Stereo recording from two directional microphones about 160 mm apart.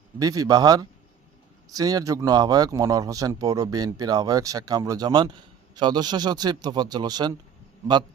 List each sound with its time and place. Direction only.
0.2 s speech: 20° right (ahead or behind)